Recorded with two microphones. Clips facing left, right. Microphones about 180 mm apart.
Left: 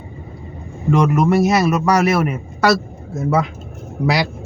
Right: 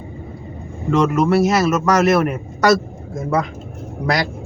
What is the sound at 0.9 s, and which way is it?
A man's voice, 15° left (ahead or behind).